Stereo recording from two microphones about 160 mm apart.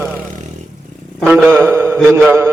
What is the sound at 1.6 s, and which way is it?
Speech, 15° right (ahead or behind).